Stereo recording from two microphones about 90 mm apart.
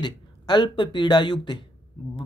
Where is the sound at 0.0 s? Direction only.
55° left (ahead or behind).